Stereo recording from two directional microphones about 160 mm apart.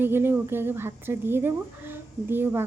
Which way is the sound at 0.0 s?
15° right (ahead or behind).